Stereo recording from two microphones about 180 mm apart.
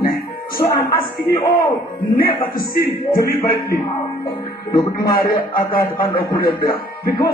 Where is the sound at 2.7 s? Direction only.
55° left (ahead or behind).